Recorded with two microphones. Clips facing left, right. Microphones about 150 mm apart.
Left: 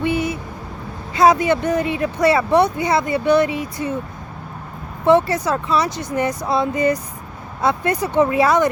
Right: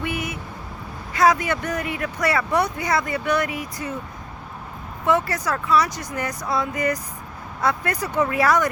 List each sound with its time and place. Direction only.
0.0 s a sound: 30° left (ahead or behind)
1.1 s speech: 25° left (ahead or behind)
5.0 s speech: 30° left (ahead or behind)